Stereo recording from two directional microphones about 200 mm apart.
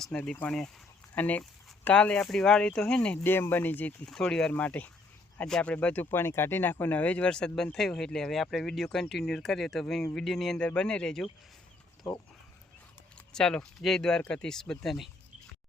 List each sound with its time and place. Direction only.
0.0 s speech: 5° left (ahead or behind)
13.3 s speech: 5° left (ahead or behind)